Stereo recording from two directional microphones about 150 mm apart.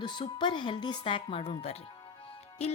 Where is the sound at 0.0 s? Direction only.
30° left (ahead or behind).